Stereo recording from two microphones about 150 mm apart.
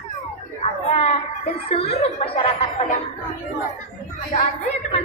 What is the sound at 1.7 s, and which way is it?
Speech, 40° left (ahead or behind).